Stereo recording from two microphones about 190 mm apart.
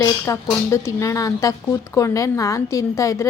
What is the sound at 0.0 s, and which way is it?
A woman's voice, 15° left (ahead or behind).